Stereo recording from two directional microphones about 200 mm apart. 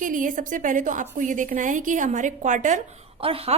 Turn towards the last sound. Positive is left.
turn(degrees=-30)  # may be behind; listen again after turning